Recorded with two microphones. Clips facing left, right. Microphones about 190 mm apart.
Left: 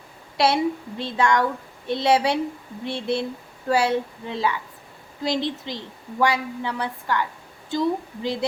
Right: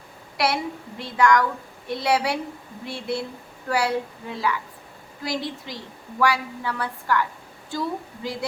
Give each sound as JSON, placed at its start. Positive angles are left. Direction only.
{"t": 0.3, "sound": "a woman's voice", "side_deg": 25}